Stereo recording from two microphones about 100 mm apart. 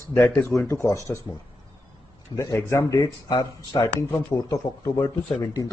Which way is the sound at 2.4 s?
30° left (ahead or behind).